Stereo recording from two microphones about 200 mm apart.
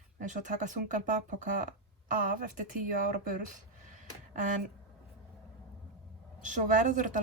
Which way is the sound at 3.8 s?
40° right (ahead or behind).